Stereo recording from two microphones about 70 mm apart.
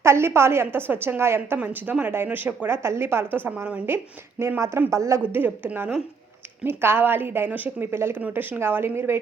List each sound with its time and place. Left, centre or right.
0.0 s a woman's voice: right
1.5 s a woman's voice: right
5.3 s a woman's voice: right